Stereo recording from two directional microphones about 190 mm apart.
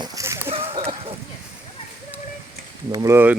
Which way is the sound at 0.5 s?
30° right (ahead or behind).